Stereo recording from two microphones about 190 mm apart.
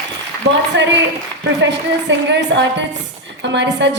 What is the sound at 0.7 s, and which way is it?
A woman's voice, 70° right (ahead or behind).